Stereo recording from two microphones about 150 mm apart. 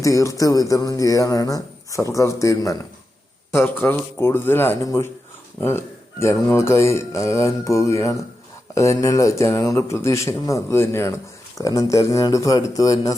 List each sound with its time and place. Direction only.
0.0 s a man's voice: 20° left (ahead or behind)